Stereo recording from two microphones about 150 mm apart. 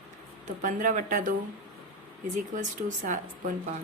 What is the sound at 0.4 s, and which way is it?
Speech, 60° right (ahead or behind).